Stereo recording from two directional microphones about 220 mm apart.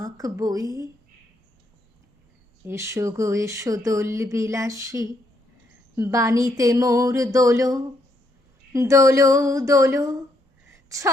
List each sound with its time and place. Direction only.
0.0 s speech: 15° right (ahead or behind)
2.6 s speech: 10° right (ahead or behind)
10.7 s a sound: 15° right (ahead or behind)